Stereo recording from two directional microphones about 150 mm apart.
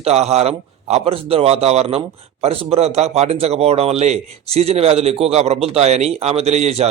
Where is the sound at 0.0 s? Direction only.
45° right (ahead or behind).